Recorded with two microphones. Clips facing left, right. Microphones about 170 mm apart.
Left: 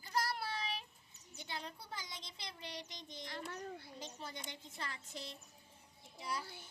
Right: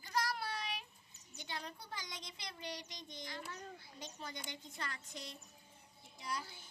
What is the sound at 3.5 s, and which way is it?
Speech, 60° left (ahead or behind).